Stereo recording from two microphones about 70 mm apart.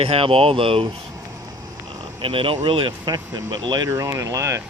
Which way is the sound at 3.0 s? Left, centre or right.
Right.